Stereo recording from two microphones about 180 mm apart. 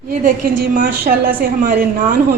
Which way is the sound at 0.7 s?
55° right (ahead or behind).